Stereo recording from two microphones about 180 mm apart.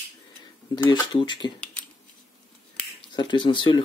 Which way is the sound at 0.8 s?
25° left (ahead or behind).